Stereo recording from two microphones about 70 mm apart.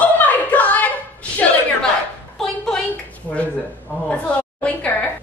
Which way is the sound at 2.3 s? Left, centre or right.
Centre.